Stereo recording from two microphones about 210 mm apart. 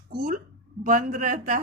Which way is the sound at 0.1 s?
45° right (ahead or behind).